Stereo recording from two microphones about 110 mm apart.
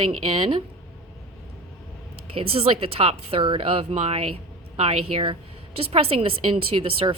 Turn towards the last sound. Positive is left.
turn(degrees=-55)  # may be behind; listen again after turning